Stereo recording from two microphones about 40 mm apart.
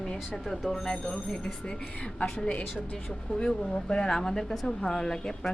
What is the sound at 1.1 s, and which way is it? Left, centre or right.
Speech, centre.